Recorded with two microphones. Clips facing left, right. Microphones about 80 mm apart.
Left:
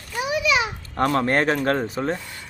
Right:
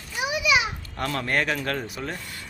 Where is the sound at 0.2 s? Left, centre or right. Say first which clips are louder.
Left 2 dB; centre.